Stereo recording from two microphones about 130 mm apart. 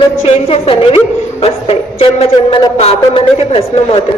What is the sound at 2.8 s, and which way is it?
A woman's voice, 50° left (ahead or behind).